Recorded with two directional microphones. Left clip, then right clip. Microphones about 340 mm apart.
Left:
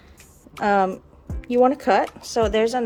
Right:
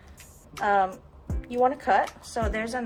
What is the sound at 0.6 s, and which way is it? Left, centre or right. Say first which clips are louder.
Speech: left 4 dB; left.